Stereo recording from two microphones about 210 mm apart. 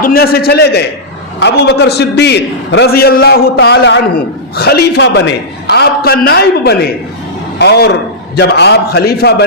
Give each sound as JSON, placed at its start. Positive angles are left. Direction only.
{"t": 0.0, "sound": "a man's voice", "side_deg": 45}